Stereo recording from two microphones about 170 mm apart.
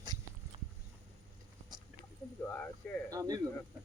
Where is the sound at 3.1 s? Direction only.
20° right (ahead or behind).